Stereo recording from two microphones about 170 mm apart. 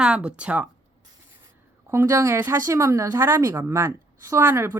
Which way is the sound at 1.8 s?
15° right (ahead or behind).